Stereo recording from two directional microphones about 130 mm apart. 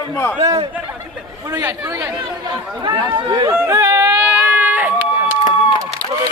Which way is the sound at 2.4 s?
30° right (ahead or behind).